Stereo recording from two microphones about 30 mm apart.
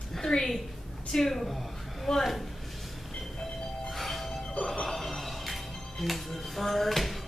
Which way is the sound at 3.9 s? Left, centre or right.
Centre.